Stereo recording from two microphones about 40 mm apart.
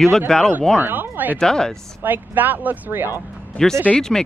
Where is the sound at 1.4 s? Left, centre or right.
Centre.